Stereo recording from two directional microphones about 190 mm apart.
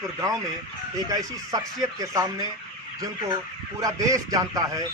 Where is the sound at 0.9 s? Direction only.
20° right (ahead or behind).